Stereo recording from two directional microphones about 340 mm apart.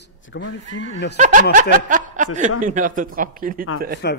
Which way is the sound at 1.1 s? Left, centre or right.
Right.